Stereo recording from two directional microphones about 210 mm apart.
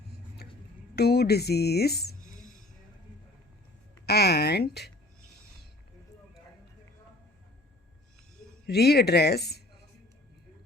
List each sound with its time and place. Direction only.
0.4 s a sound: 50° left (ahead or behind)
0.9 s speech: 50° left (ahead or behind)
4.0 s speech: 50° left (ahead or behind)
8.6 s speech: 50° left (ahead or behind)